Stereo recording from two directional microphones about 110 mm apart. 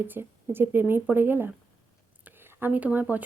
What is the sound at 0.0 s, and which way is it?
Speech, 20° right (ahead or behind).